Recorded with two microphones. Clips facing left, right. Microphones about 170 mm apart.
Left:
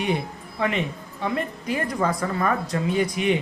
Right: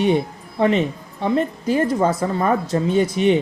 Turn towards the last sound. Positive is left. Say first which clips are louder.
# right 5 dB
turn(degrees=-30)  # may be behind; listen again after turning